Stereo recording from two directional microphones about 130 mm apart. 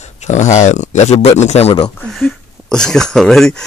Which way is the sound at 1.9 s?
5° left (ahead or behind).